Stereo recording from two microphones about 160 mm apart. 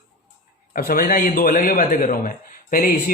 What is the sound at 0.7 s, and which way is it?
A man's voice, 65° left (ahead or behind).